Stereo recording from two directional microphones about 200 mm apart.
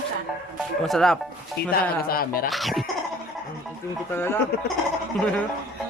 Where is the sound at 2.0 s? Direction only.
45° left (ahead or behind).